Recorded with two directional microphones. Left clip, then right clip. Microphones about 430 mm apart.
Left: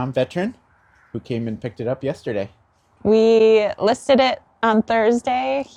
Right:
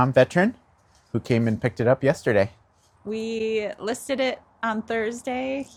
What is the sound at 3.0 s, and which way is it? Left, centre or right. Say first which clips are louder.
A woman's voice: left 14 dB; left.